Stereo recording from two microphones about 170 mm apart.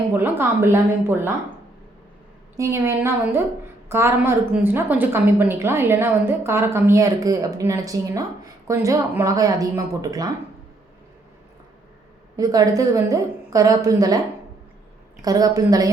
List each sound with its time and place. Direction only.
0.1 s a woman's voice: 10° right (ahead or behind)
2.6 s a woman's voice: 15° right (ahead or behind)
12.4 s a woman's voice: 20° right (ahead or behind)
15.2 s a woman's voice: 20° right (ahead or behind)